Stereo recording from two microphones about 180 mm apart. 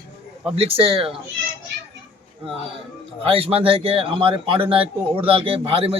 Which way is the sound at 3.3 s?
30° right (ahead or behind).